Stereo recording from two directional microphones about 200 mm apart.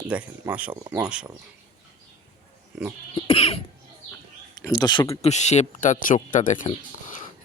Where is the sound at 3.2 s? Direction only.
30° left (ahead or behind).